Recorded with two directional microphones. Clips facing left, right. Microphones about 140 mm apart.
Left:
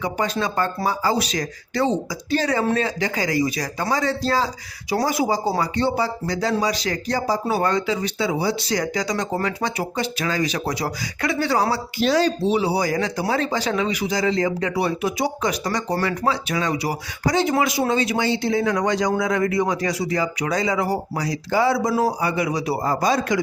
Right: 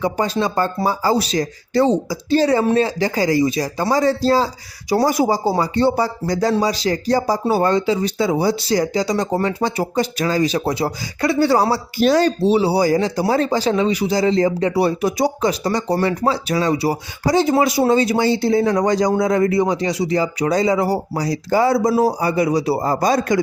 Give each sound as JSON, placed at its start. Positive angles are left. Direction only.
{"t": 0.0, "sound": "speech", "side_deg": -30}
{"t": 12.5, "sound": "speech", "side_deg": -30}